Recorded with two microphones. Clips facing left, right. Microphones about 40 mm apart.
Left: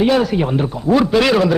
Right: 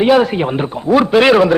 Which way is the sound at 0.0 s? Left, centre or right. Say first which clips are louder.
Right 3 dB; right.